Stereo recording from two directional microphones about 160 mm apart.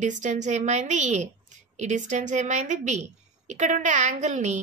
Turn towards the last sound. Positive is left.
turn(degrees=-50)  # may be behind; listen again after turning